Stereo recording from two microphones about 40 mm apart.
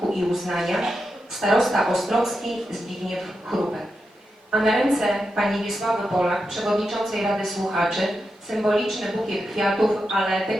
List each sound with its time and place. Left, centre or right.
0.1 s speech: centre